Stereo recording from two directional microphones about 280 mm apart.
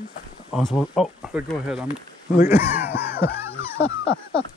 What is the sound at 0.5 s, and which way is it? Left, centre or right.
Speech, centre.